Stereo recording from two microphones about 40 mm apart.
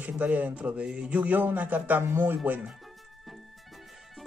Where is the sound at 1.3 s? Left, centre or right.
Right.